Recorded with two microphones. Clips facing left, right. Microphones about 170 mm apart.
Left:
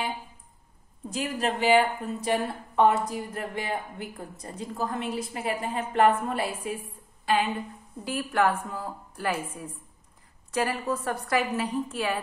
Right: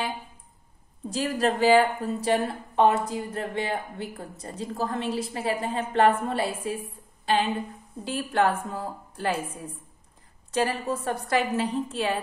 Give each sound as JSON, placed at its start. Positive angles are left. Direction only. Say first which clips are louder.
{"t": 1.1, "sound": "a woman's voice", "louder": "right 4 dB", "side_deg": -35}